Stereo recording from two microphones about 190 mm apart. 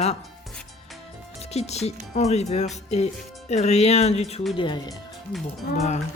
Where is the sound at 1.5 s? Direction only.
35° left (ahead or behind).